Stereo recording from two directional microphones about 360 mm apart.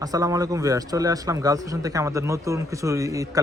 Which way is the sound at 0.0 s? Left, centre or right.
Centre.